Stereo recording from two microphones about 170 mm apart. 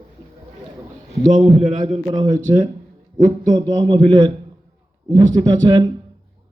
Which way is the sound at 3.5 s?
20° right (ahead or behind).